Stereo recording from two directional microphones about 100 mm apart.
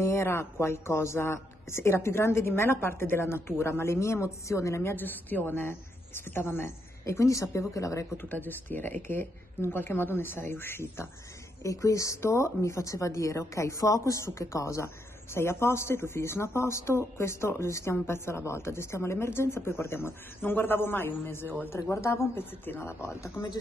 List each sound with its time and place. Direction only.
0.0 s a woman's voice: 25° left (ahead or behind)
8.2 s a woman's voice: 20° left (ahead or behind)